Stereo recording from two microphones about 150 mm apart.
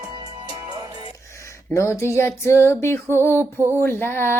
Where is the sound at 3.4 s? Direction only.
20° right (ahead or behind).